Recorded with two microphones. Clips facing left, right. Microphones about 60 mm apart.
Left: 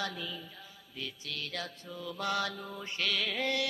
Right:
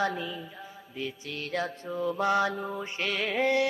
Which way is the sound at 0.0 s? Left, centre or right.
Right.